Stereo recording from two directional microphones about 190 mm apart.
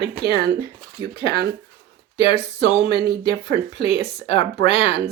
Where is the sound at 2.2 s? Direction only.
30° left (ahead or behind).